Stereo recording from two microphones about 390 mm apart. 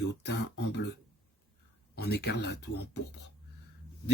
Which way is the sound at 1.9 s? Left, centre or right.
Left.